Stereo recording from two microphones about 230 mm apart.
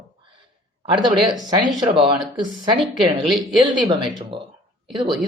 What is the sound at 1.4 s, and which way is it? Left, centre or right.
Speech, centre.